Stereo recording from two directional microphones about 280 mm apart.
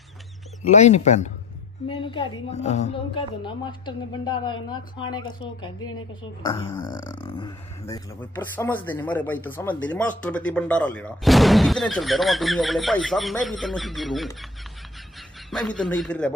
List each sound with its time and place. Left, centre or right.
0.7 s a woman's voice: left; by 16.3 s centre